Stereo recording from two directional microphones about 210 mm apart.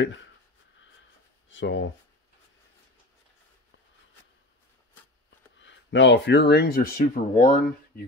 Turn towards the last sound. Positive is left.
turn(degrees=40)  # may be behind; listen again after turning